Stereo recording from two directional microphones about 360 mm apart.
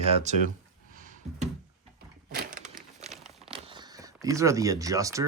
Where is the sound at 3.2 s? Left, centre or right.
Centre.